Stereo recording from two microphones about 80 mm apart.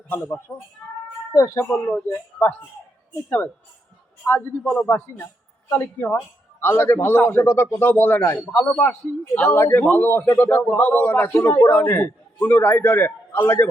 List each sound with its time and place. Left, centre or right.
0.1 s a man's voice: left
1.3 s a man's voice: left
2.0 s a man's voice: left
8.4 s a man's voice: centre
8.8 s a man's voice: left